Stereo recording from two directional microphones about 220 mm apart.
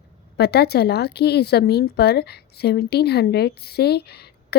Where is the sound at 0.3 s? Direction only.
45° left (ahead or behind).